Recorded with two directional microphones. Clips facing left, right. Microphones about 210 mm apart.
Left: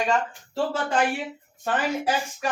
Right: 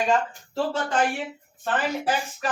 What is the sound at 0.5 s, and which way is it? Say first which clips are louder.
Speech: even; 5° left (ahead or behind).